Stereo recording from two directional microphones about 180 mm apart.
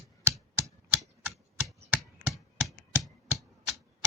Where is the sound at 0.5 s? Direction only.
15° right (ahead or behind).